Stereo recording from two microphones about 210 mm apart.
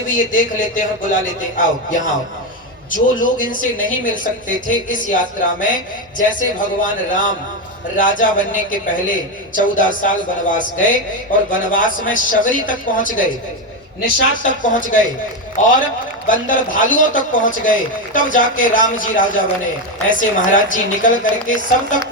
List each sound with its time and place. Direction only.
0.1 s a woman's voice: 40° left (ahead or behind)
14.4 s a woman's voice: 40° left (ahead or behind)